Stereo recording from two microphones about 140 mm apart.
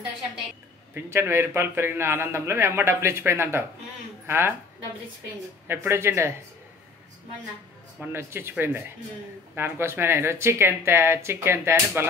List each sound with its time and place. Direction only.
0.9 s a man's voice: 15° right (ahead or behind)
5.7 s speech: 15° right (ahead or behind)
8.0 s a man's voice: 15° right (ahead or behind)